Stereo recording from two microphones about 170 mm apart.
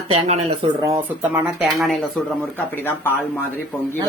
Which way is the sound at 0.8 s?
20° right (ahead or behind).